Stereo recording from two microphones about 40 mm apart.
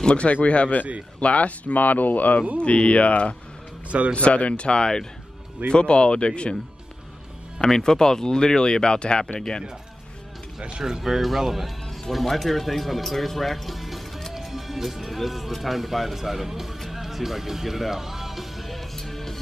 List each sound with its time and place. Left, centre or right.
0.0 s speech: left
2.6 s speech: left
7.6 s speech: centre
10.8 s speech: centre
16.8 s music: centre